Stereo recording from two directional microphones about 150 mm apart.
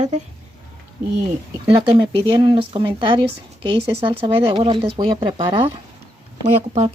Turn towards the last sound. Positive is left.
turn(degrees=-45)  # may be behind; listen again after turning